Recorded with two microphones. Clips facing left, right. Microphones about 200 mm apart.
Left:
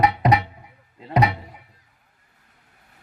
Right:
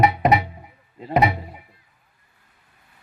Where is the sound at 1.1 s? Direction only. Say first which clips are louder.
Right 1 dB; 25° right (ahead or behind).